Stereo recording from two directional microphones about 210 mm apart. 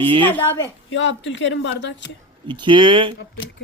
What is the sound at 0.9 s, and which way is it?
Speech, 60° left (ahead or behind).